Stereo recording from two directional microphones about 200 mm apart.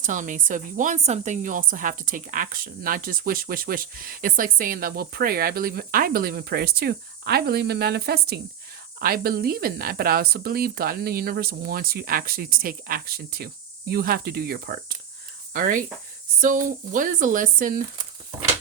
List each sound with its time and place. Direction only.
0.0 s speech: 40° right (ahead or behind)